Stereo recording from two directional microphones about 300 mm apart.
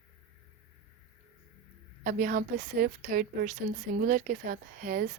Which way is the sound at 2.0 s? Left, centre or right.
Right.